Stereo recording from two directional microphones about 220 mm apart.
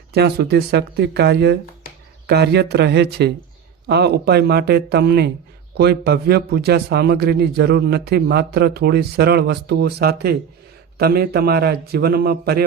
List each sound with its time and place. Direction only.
0.1 s a man's voice: 45° right (ahead or behind)